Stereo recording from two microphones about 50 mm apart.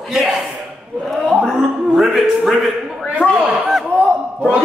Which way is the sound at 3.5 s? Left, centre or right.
Centre.